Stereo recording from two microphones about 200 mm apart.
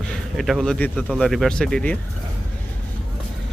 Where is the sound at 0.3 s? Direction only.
Centre (ahead or behind).